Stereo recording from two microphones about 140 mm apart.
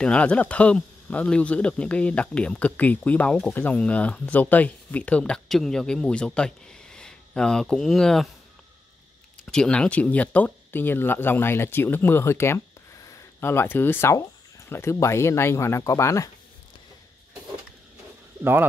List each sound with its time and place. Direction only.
0.0 s speech: 10° left (ahead or behind)
9.5 s speech: 5° left (ahead or behind); by 16.3 s 20° left (ahead or behind)
18.4 s speech: 15° right (ahead or behind)